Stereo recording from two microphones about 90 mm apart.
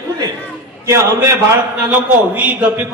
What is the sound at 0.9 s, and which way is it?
Speech, 30° right (ahead or behind).